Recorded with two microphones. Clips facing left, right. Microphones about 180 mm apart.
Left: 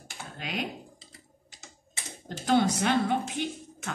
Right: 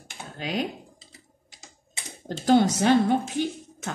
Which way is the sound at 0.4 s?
35° right (ahead or behind).